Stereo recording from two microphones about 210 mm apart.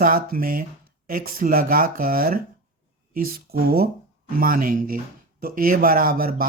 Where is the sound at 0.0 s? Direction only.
45° right (ahead or behind).